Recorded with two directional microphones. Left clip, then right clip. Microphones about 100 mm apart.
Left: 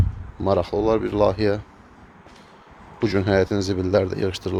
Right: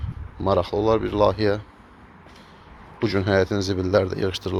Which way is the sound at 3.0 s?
60° left (ahead or behind).